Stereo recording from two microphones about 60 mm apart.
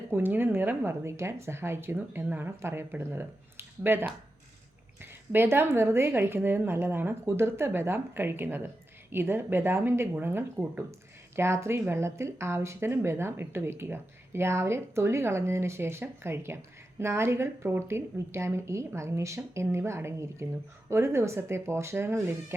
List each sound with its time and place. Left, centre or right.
0.1 s a woman's voice: right
1.0 s speech: right
2.2 s a woman's voice: right
2.6 s a woman's voice: right